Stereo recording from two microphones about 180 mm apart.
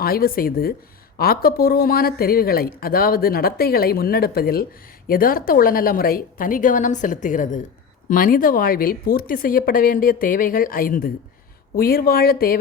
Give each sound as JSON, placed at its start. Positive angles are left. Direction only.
{"t": 0.0, "sound": "speech", "side_deg": 55}